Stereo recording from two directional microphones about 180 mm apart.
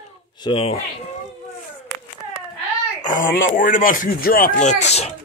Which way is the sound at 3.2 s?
50° left (ahead or behind).